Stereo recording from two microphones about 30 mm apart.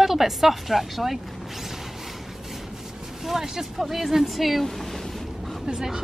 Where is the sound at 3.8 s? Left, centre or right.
Centre.